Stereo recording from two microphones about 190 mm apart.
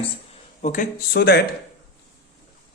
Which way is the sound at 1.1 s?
60° left (ahead or behind).